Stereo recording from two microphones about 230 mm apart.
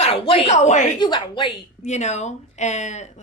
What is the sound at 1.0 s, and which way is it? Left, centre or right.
A woman's voice, centre.